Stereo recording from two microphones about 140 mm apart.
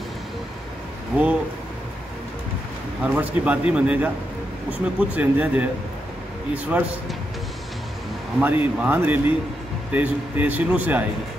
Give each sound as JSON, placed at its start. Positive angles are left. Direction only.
{"t": 3.0, "sound": "a man's voice", "side_deg": -10}
{"t": 8.4, "sound": "a man's voice", "side_deg": -15}